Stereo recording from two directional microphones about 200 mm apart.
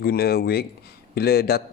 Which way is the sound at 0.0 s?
50° left (ahead or behind).